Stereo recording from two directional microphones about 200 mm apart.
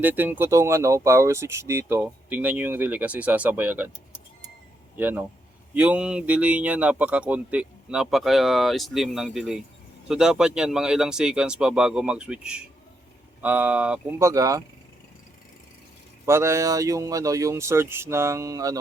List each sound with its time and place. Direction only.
0.0 s speech: 10° right (ahead or behind)
4.9 s speech: 10° right (ahead or behind)
16.2 s speech: 15° right (ahead or behind)